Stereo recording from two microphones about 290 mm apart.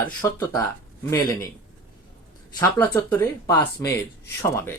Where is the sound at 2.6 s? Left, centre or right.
Centre.